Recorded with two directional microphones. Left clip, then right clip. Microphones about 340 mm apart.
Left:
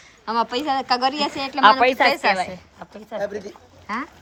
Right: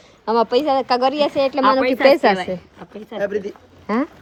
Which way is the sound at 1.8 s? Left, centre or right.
Centre.